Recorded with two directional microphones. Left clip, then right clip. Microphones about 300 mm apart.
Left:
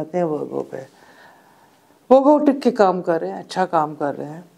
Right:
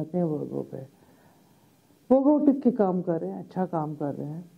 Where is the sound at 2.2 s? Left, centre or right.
Centre.